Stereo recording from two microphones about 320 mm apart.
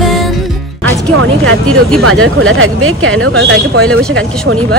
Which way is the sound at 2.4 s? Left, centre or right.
Right.